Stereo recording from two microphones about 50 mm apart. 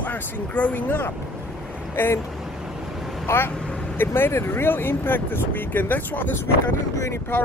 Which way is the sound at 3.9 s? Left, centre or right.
Left.